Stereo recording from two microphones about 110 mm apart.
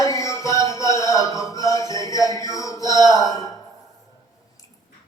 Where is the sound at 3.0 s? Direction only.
30° left (ahead or behind).